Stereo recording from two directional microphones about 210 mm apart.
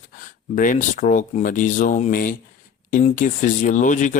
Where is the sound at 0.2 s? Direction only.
40° left (ahead or behind).